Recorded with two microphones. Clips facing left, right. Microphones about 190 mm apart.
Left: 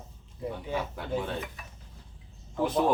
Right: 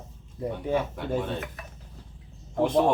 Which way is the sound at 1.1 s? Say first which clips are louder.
Right 2 dB; centre (ahead or behind).